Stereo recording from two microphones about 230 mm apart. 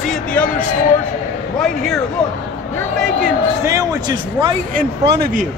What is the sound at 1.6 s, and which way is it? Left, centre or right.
Speech, centre.